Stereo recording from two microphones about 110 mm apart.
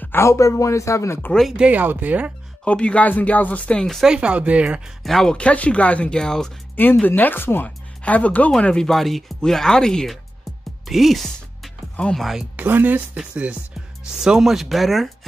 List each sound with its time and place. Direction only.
0.0 s speech: 20° left (ahead or behind)
1.6 s speech: 15° right (ahead or behind)
2.6 s speech: 10° left (ahead or behind)
4.1 s speech: 10° right (ahead or behind)
5.0 s speech: 5° left (ahead or behind)
6.8 s speech: 20° left (ahead or behind); by 12.4 s centre (ahead or behind)
12.5 s speech: 15° right (ahead or behind); by 15.0 s centre (ahead or behind)